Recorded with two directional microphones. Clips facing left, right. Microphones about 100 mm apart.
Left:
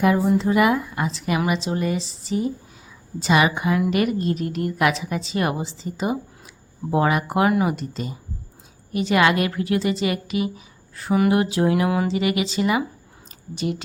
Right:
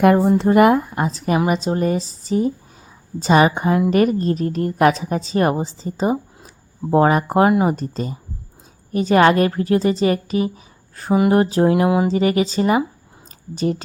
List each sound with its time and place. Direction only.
0.0 s a woman's voice: 55° right (ahead or behind); by 12.0 s 25° right (ahead or behind)
12.0 s a woman's voice: 40° right (ahead or behind)